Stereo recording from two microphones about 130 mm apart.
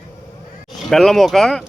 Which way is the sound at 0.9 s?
Centre (ahead or behind).